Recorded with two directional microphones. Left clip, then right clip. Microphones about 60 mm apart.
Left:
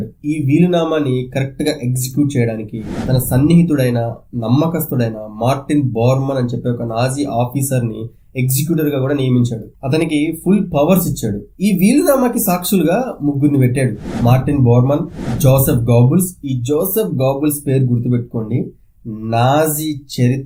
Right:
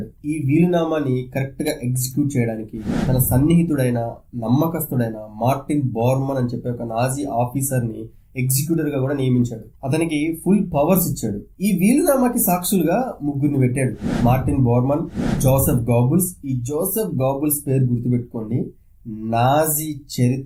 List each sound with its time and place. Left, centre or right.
0.3 s speech: left